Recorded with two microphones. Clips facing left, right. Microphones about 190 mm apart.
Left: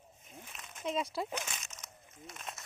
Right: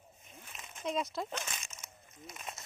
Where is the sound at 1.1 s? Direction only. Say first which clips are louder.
Left 1 dB; 10° left (ahead or behind).